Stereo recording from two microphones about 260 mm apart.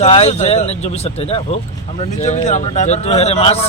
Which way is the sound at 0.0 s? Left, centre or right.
Left.